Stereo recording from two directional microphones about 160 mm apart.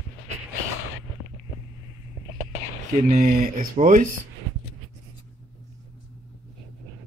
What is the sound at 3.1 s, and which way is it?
Speech, 60° right (ahead or behind).